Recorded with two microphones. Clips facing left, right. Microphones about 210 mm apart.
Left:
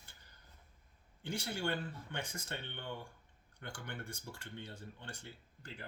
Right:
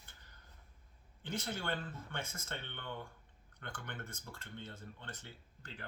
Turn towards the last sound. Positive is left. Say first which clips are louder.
# left 1 dB
turn(degrees=10)  # may be behind; listen again after turning